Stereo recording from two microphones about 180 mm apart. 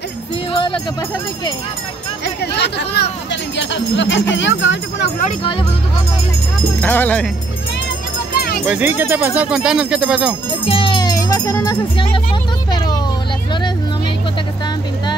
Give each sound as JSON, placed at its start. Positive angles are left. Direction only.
{"t": 0.5, "sound": "music", "side_deg": 30}
{"t": 2.2, "sound": "speech", "side_deg": 70}
{"t": 3.5, "sound": "speech", "side_deg": 80}
{"t": 5.2, "sound": "speech", "side_deg": 30}
{"t": 6.8, "sound": "speech", "side_deg": 10}
{"t": 8.4, "sound": "a sound", "side_deg": 55}
{"t": 8.6, "sound": "speech", "side_deg": -10}
{"t": 10.7, "sound": "music", "side_deg": 30}
{"t": 12.7, "sound": "a sound", "side_deg": 20}